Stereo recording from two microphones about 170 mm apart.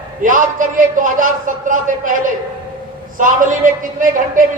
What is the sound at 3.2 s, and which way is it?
Speech, 50° right (ahead or behind).